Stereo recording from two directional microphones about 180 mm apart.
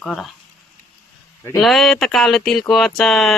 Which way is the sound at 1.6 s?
Centre (ahead or behind).